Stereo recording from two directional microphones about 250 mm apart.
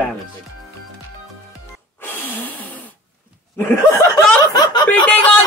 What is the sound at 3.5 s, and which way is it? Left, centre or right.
Snicker, centre.